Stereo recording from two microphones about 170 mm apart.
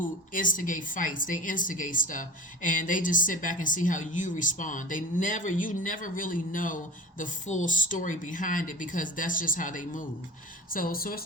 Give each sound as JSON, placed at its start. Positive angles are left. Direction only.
{"t": 0.0, "sound": "speech", "side_deg": 50}